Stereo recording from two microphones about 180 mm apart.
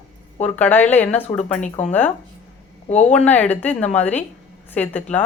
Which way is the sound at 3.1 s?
10° left (ahead or behind).